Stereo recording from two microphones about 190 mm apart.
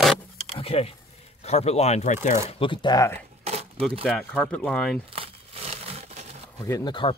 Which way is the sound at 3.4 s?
35° right (ahead or behind).